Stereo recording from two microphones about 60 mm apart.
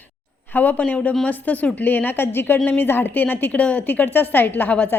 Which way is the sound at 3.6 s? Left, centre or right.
Left.